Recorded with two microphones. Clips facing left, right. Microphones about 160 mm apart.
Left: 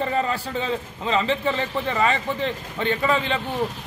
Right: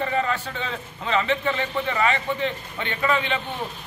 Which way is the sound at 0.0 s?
35° left (ahead or behind).